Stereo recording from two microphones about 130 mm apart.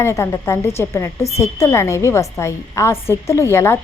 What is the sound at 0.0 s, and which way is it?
A woman's voice, 20° left (ahead or behind).